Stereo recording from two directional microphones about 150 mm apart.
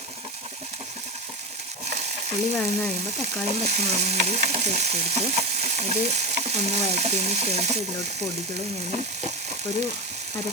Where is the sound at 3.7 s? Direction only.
45° right (ahead or behind).